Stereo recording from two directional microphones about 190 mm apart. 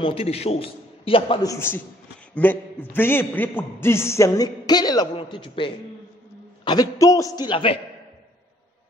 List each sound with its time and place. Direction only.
0.0 s a man's voice: 30° left (ahead or behind)